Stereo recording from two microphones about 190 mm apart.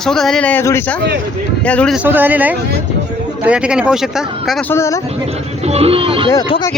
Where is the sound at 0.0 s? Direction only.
Centre (ahead or behind).